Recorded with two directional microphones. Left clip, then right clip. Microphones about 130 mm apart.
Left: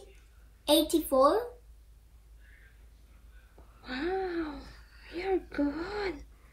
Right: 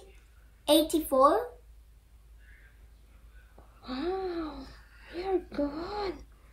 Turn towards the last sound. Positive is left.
turn(degrees=-45)  # may be behind; listen again after turning